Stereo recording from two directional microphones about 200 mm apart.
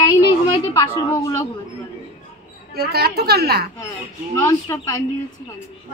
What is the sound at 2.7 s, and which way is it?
Speech, 50° right (ahead or behind).